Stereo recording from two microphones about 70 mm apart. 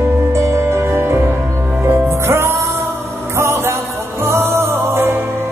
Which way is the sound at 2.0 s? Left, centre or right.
Right.